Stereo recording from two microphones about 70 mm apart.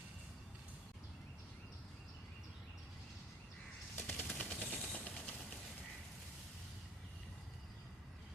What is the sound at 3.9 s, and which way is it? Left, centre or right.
Music, left.